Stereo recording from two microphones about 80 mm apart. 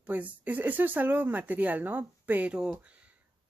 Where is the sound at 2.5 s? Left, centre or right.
Centre.